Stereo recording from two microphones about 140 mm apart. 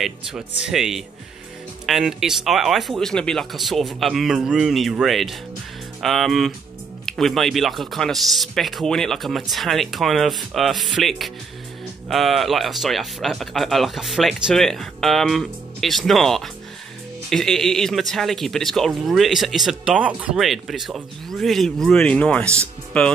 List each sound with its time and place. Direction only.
0.0 s speech: 5° right (ahead or behind)